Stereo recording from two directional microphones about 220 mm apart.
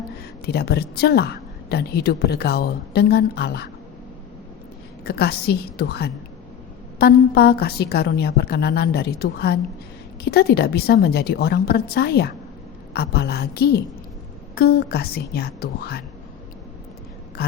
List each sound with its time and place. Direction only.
0.4 s speech: 45° left (ahead or behind)
5.0 s speech: 45° left (ahead or behind)